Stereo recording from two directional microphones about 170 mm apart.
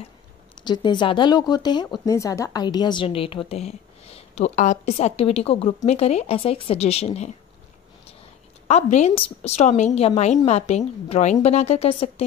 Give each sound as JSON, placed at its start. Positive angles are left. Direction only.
{"t": 0.7, "sound": "speech", "side_deg": 25}
{"t": 8.6, "sound": "speech", "side_deg": 40}